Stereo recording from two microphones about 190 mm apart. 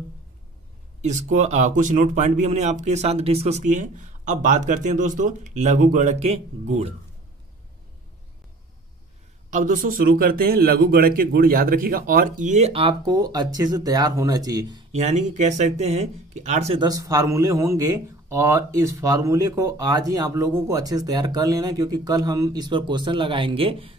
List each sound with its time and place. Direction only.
1.0 s speech: 40° right (ahead or behind)
9.5 s a man's voice: 45° right (ahead or behind); by 14.8 s 20° right (ahead or behind)
15.0 s speech: 40° right (ahead or behind)
16.8 s speech: 20° right (ahead or behind)